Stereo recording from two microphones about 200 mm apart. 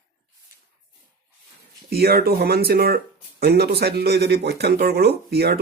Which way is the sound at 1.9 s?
50° right (ahead or behind).